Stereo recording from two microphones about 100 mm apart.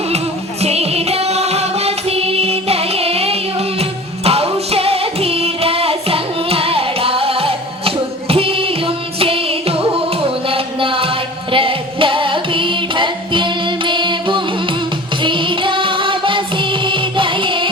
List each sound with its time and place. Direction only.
0.6 s music: 90° right; by 17.7 s 55° right (ahead or behind)